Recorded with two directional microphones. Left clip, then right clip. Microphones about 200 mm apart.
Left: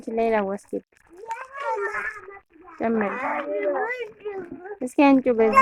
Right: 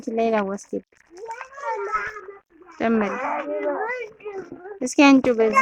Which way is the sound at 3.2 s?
35° left (ahead or behind).